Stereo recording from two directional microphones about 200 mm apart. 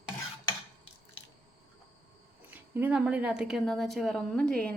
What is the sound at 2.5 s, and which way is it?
A woman's voice, 10° right (ahead or behind).